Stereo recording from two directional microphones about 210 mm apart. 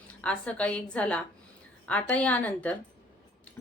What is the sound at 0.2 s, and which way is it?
A woman's voice, 5° left (ahead or behind).